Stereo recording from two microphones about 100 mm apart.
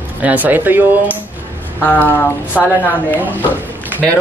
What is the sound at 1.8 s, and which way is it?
Speech, 20° left (ahead or behind).